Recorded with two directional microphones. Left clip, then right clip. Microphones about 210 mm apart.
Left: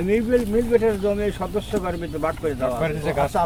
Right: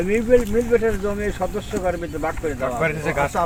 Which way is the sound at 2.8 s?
Centre (ahead or behind).